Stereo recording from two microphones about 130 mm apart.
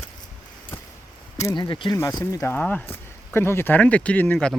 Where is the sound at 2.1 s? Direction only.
25° left (ahead or behind).